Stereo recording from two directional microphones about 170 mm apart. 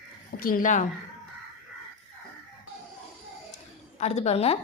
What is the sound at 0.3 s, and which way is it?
Speech, 55° left (ahead or behind).